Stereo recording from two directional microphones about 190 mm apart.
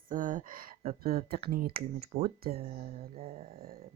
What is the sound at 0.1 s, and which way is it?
Speech, 45° right (ahead or behind).